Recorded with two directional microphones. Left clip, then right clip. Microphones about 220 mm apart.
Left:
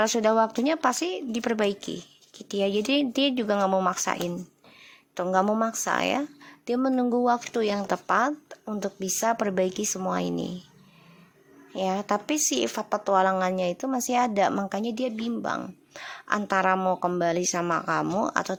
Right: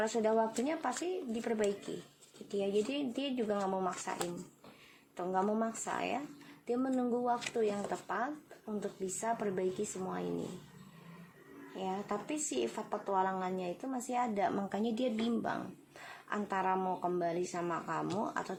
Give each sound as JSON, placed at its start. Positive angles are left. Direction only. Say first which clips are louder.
{"t": 0.0, "sound": "a woman's voice", "louder": "left 10 dB", "side_deg": 45}
{"t": 11.8, "sound": "a woman's voice", "louder": "left 12 dB", "side_deg": 50}